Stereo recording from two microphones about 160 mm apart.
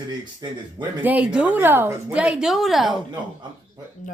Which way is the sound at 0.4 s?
20° right (ahead or behind).